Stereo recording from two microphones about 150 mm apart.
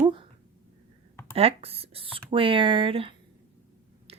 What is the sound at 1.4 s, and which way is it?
Speech, 40° right (ahead or behind).